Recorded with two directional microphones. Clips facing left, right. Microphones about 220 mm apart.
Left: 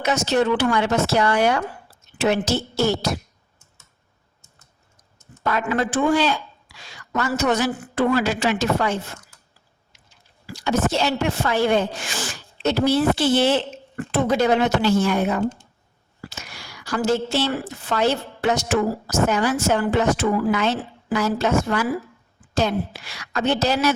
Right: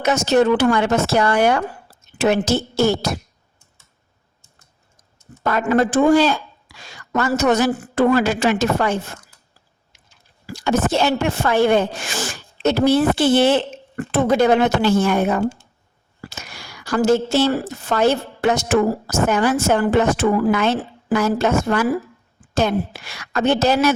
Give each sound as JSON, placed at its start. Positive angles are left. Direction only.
{"t": 0.0, "sound": "a woman's voice", "side_deg": -45}
{"t": 5.4, "sound": "a woman's voice", "side_deg": -45}
{"t": 10.4, "sound": "a woman's voice", "side_deg": -50}